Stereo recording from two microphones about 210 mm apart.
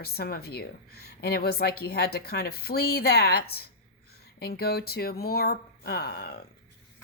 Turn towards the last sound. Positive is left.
turn(degrees=50)  # may be behind; listen again after turning